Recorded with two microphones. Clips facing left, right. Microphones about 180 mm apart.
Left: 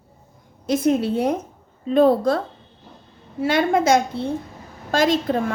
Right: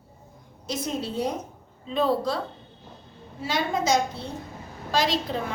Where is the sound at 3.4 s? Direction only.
55° left (ahead or behind).